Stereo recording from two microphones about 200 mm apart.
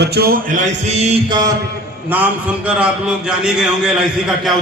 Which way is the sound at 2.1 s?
10° right (ahead or behind).